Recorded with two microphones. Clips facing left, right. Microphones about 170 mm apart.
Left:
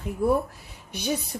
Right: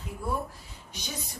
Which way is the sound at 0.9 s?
60° left (ahead or behind).